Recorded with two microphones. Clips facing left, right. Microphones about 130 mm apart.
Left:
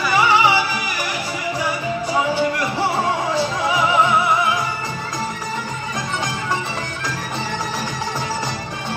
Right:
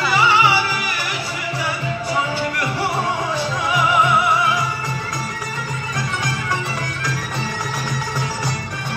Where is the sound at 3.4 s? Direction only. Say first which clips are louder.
Left 1 dB; 25° left (ahead or behind).